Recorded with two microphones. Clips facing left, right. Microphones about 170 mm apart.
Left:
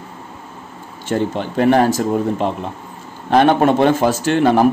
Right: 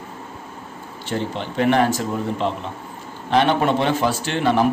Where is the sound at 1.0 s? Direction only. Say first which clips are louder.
Left 6 dB; 45° left (ahead or behind).